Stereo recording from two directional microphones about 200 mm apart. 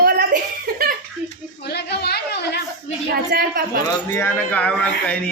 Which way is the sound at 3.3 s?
45° right (ahead or behind).